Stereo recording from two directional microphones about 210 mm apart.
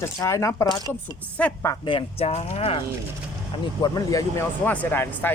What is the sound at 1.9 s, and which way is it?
Speech, 30° left (ahead or behind).